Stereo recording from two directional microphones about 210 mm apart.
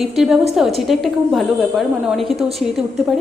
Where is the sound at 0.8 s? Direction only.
Centre (ahead or behind).